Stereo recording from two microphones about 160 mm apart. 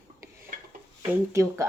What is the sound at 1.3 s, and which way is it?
Speech, 20° right (ahead or behind).